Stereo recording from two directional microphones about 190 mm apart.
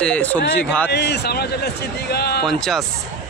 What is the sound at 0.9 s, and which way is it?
A man's voice, 60° left (ahead or behind).